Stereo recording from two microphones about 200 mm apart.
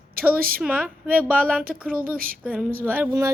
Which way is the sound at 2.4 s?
5° right (ahead or behind).